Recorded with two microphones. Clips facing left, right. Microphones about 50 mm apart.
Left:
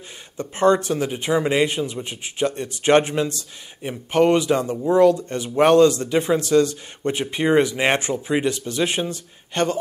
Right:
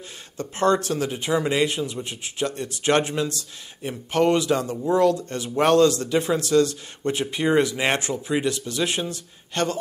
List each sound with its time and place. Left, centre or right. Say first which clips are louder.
0.4 s speech: left 3 dB; left
3.8 s speech: left 3 dB; centre
8.5 s speech: left 2 dB; left